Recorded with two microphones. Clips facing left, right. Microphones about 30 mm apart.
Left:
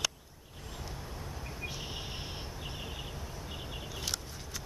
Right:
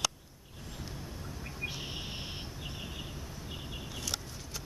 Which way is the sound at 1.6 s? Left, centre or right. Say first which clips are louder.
Right 3 dB; centre.